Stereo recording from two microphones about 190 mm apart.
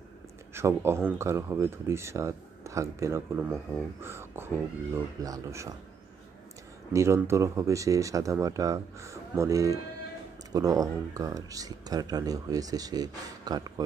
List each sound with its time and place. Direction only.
0.6 s speech: 15° right (ahead or behind)
6.9 s speech: 15° right (ahead or behind)